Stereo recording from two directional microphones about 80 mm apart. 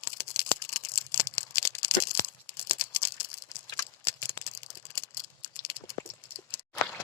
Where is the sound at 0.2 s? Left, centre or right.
Left.